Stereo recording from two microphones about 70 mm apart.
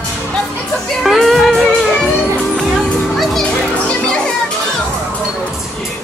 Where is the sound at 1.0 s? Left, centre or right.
Centre.